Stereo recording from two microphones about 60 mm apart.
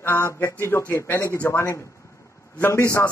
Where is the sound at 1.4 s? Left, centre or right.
Left.